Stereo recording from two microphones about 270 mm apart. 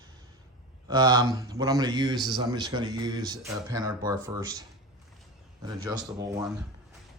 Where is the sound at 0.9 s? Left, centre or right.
Centre.